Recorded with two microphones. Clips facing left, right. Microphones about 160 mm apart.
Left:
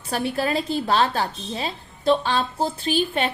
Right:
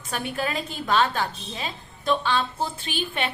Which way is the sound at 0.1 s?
35° left (ahead or behind).